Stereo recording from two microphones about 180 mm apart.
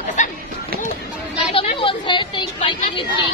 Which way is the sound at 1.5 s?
30° left (ahead or behind).